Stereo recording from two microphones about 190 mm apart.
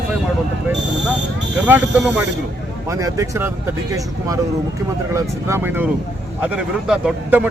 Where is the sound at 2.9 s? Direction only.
15° right (ahead or behind).